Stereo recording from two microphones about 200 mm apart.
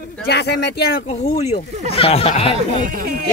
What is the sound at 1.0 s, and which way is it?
Speech, 35° left (ahead or behind).